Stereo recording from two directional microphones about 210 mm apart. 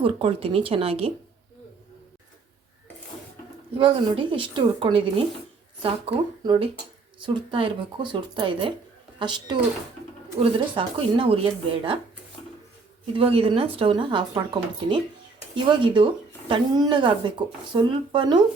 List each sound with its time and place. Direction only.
0.0 s speech: 25° right (ahead or behind)
3.8 s speech: 25° right (ahead or behind)
13.1 s speech: 25° right (ahead or behind)